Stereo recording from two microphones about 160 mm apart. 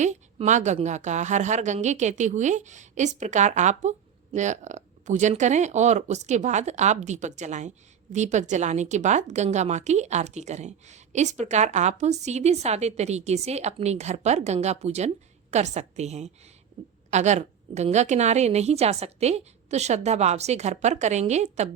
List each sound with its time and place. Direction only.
0.0 s a woman's voice: 45° right (ahead or behind)